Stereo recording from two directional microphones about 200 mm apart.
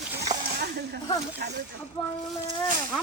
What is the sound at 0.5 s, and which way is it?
Snake, 55° right (ahead or behind).